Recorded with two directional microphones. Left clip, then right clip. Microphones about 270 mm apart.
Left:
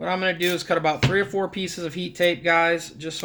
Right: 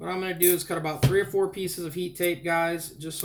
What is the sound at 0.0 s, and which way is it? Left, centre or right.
Speech, left.